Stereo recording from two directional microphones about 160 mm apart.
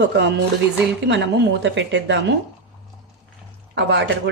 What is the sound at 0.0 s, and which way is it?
Speech, 90° right.